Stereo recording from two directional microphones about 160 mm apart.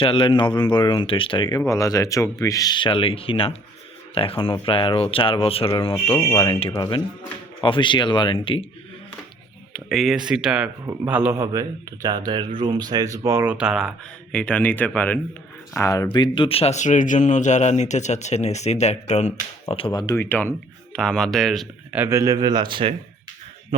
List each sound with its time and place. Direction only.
0.0 s speech: 35° left (ahead or behind)
6.1 s speech: 15° left (ahead or behind)
6.4 s speech: 30° left (ahead or behind)
6.7 s speech: 20° left (ahead or behind)
7.6 s speech: 30° left (ahead or behind)
9.9 s speech: centre (ahead or behind)
14.3 s speech: 10° left (ahead or behind); by 20.1 s 25° left (ahead or behind)
20.1 s speech: 10° left (ahead or behind)
21.9 s speech: 15° right (ahead or behind); by 23.0 s 30° right (ahead or behind)